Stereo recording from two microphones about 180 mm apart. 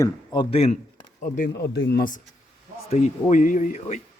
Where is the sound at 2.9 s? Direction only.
45° left (ahead or behind).